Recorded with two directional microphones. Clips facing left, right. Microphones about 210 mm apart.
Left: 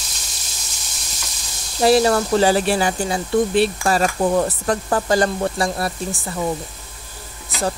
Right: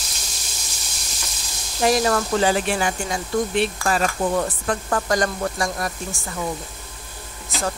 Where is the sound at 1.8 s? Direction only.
30° left (ahead or behind).